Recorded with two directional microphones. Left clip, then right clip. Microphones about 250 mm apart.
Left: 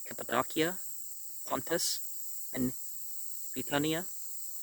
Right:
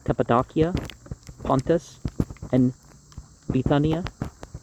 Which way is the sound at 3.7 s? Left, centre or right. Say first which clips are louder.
Right 7 dB; left.